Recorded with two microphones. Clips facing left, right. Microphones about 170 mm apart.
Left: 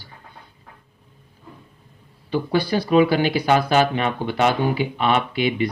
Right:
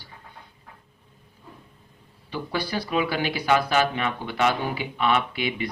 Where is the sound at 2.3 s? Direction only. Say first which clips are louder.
Left 8 dB; 30° left (ahead or behind).